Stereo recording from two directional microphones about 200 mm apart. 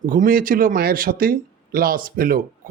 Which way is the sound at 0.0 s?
40° right (ahead or behind).